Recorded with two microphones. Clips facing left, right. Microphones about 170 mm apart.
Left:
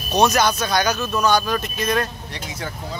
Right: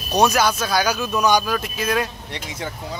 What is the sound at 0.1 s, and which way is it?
Speech, 10° right (ahead or behind).